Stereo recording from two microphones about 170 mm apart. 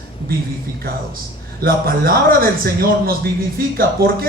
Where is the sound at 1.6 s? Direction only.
60° right (ahead or behind).